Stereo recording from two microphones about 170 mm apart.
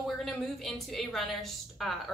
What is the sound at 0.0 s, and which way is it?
A woman's voice, centre (ahead or behind).